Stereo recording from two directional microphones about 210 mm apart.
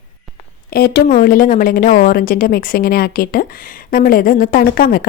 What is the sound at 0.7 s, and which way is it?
A woman's voice, 45° left (ahead or behind).